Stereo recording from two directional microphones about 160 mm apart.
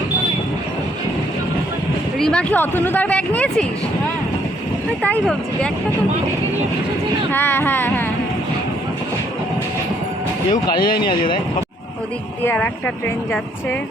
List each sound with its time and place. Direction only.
2.1 s speech: 5° left (ahead or behind)
5.0 s speech: 5° left (ahead or behind)
7.3 s speech: 15° left (ahead or behind)
10.5 s speech: 25° left (ahead or behind)
12.4 s speech: 15° left (ahead or behind)